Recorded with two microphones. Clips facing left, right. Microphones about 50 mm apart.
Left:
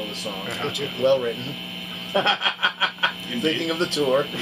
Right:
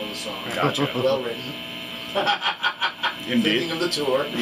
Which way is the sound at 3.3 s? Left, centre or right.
Right.